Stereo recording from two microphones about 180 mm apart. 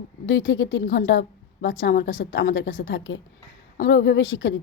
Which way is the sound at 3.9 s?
70° left (ahead or behind).